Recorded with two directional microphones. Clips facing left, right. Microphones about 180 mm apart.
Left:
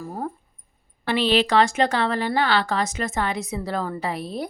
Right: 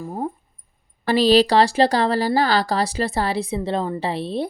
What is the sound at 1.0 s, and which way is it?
Speech, 40° right (ahead or behind).